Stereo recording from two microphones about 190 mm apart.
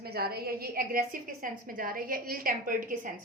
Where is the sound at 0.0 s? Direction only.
55° right (ahead or behind).